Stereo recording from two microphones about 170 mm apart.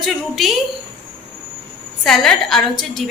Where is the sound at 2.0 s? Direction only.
Centre (ahead or behind).